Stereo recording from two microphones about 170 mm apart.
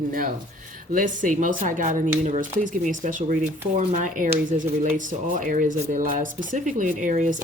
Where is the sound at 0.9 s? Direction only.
50° right (ahead or behind).